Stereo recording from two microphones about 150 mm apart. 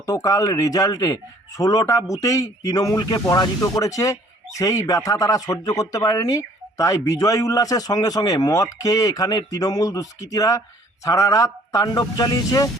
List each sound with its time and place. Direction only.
0.0 s speech: 25° left (ahead or behind)